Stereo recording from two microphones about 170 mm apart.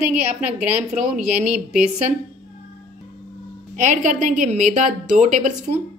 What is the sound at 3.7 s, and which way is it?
A woman's voice, 45° right (ahead or behind).